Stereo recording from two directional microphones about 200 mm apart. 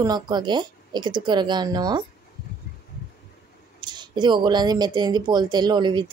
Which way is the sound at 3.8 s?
20° right (ahead or behind).